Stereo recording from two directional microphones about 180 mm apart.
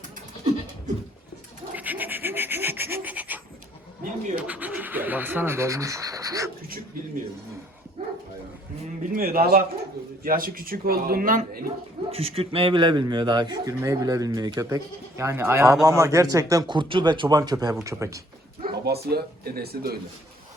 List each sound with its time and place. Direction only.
1.7 s goat: 10° right (ahead or behind)
4.0 s speech: 45° right (ahead or behind)
4.4 s speech: 10° right (ahead or behind)
9.1 s a man's voice: 55° right (ahead or behind)
12.1 s a man's voice: 35° right (ahead or behind); by 18.2 s 15° right (ahead or behind)
18.6 s speech: 60° right (ahead or behind)